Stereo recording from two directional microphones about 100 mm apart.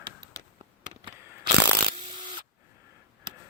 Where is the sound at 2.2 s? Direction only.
55° right (ahead or behind).